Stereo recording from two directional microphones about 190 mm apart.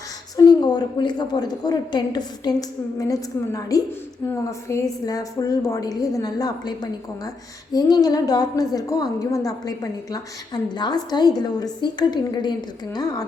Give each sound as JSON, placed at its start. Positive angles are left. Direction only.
{"t": 0.3, "sound": "a woman's voice", "side_deg": 20}